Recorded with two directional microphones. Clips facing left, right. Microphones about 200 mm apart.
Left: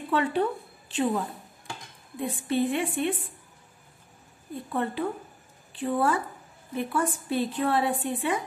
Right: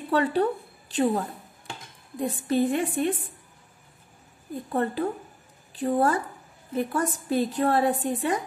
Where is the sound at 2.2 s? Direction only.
40° right (ahead or behind).